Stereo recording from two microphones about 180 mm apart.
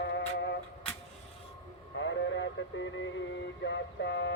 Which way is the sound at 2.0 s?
90° left.